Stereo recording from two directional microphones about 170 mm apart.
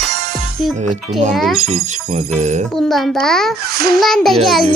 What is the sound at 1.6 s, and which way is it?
Speech, 40° right (ahead or behind).